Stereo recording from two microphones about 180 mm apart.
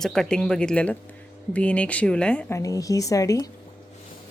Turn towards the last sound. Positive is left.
turn(degrees=20)  # may be behind; listen again after turning